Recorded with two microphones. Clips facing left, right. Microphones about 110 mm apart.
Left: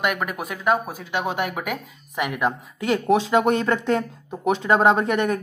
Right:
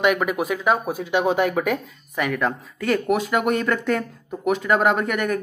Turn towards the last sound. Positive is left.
turn(degrees=25)  # may be behind; listen again after turning